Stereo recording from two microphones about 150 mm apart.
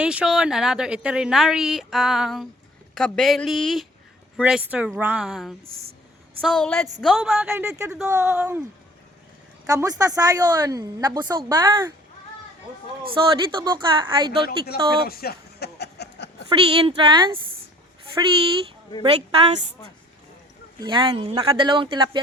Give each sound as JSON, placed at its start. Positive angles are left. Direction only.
{"t": 0.0, "sound": "a woman's voice", "side_deg": -5}
{"t": 8.0, "sound": "speech", "side_deg": -20}
{"t": 9.6, "sound": "a woman's voice", "side_deg": -25}
{"t": 13.2, "sound": "a woman's voice", "side_deg": -30}
{"t": 14.4, "sound": "speech", "side_deg": 85}
{"t": 16.5, "sound": "speech", "side_deg": -35}
{"t": 19.0, "sound": "speech", "side_deg": -40}
{"t": 20.8, "sound": "speech", "side_deg": -30}